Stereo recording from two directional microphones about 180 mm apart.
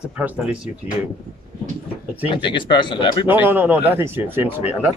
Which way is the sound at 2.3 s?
25° left (ahead or behind).